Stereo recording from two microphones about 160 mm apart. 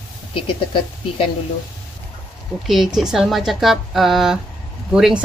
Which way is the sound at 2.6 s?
Centre (ahead or behind).